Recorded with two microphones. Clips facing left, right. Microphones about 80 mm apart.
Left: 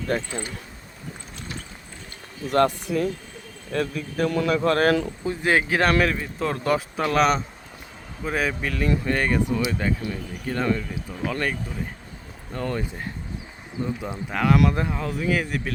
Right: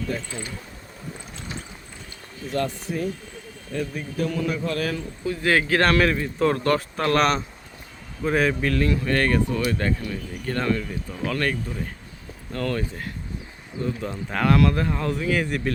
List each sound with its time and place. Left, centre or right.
0.1 s speech: left
2.5 s speech: left
3.7 s speech: left
4.2 s speech: left
5.2 s speech: left
12.5 s speech: centre
14.3 s speech: centre
14.6 s speech: centre
14.9 s speech: centre